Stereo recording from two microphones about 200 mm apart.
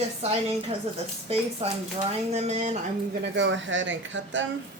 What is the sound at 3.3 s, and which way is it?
Speech, 65° right (ahead or behind).